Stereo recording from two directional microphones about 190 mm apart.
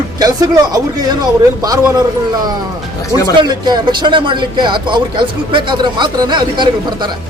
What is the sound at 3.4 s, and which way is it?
Speech, 20° right (ahead or behind).